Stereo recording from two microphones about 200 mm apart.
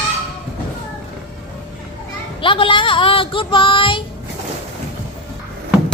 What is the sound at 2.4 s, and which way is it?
Speech, 25° left (ahead or behind).